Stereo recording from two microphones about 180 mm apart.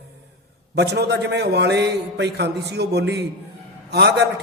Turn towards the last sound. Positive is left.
turn(degrees=-70)  # may be behind; listen again after turning